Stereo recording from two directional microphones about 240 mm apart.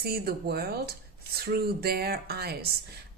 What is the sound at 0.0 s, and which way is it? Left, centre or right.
Speech, right.